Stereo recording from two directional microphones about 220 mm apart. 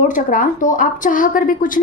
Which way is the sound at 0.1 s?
35° left (ahead or behind).